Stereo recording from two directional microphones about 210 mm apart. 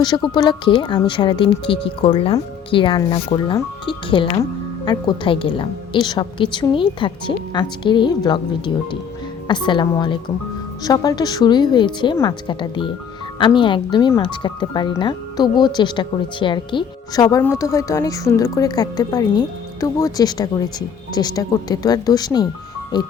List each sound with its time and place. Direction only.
0.0 s speech: 20° left (ahead or behind)